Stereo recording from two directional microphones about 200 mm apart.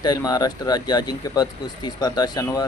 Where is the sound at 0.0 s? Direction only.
20° left (ahead or behind).